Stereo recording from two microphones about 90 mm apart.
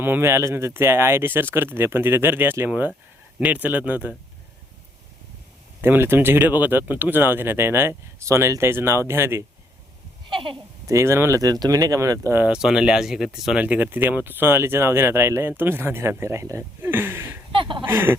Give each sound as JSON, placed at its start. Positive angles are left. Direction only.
{"t": 0.0, "sound": "speech", "side_deg": -25}
{"t": 5.8, "sound": "speech", "side_deg": -25}
{"t": 10.2, "sound": "sheep", "side_deg": -65}
{"t": 10.8, "sound": "speech", "side_deg": -30}
{"t": 12.5, "sound": "speech", "side_deg": -5}
{"t": 13.6, "sound": "speech", "side_deg": -20}
{"t": 16.9, "sound": "a sound", "side_deg": -20}
{"t": 17.5, "sound": "speech", "side_deg": -70}
{"t": 17.8, "sound": "speech", "side_deg": -25}